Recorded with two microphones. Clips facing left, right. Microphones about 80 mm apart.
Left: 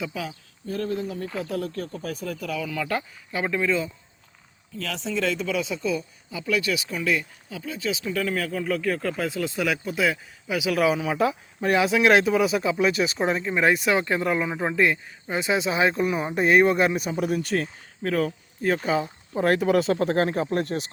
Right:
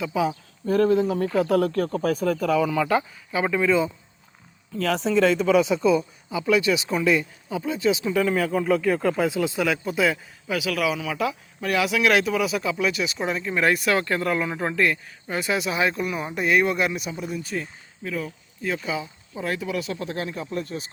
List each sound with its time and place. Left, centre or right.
0.6 s speech: right
1.5 s speech: right
2.0 s speech: right
2.6 s speech: centre
4.8 s speech: right
8.1 s speech: centre
10.5 s speech: centre
10.8 s speech: left
13.5 s speech: left
17.2 s speech: left
18.6 s speech: left
19.0 s speech: left
19.5 s speech: left